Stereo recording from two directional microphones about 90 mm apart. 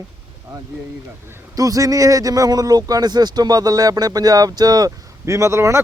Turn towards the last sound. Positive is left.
turn(degrees=-30)  # may be behind; listen again after turning